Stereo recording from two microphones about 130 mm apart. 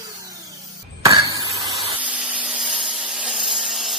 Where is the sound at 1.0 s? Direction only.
30° right (ahead or behind).